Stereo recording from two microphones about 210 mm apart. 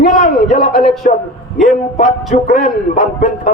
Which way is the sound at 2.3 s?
35° left (ahead or behind).